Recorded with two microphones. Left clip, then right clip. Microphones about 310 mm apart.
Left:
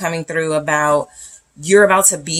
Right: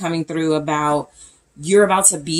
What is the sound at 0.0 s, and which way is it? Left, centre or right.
Speech, left.